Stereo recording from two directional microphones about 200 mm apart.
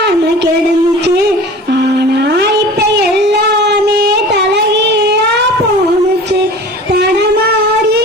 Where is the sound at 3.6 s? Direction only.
55° right (ahead or behind).